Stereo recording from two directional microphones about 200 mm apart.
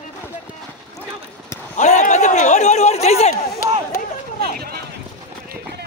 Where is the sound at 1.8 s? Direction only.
40° left (ahead or behind).